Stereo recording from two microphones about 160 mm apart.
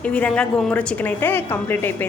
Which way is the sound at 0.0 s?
10° left (ahead or behind).